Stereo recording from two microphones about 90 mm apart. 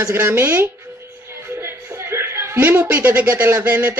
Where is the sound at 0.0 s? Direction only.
25° right (ahead or behind).